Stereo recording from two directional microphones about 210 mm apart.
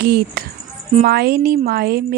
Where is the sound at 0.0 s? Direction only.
45° right (ahead or behind).